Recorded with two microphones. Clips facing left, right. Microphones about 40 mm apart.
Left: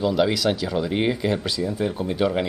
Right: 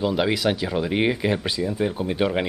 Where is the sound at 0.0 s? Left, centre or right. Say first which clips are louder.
Left 1 dB; centre.